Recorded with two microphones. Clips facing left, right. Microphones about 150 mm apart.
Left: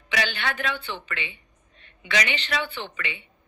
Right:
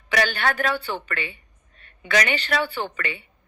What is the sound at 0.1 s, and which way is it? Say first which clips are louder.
A woman's voice: right 5 dB; 45° right (ahead or behind).